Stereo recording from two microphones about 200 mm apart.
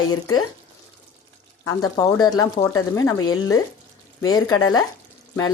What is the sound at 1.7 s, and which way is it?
Speech, 15° left (ahead or behind).